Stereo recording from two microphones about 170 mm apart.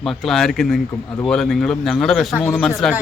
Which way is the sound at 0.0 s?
Centre (ahead or behind).